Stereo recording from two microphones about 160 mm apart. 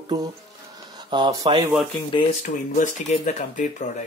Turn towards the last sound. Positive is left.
turn(degrees=45)  # may be behind; listen again after turning